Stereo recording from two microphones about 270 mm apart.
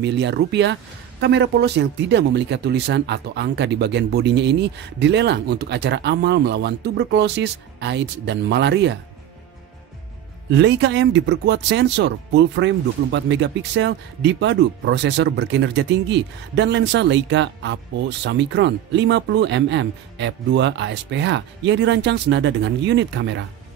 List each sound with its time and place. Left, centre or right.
0.0 s speech: right
10.5 s speech: right